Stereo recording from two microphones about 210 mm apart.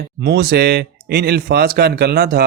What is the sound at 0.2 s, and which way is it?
Speech, 50° right (ahead or behind).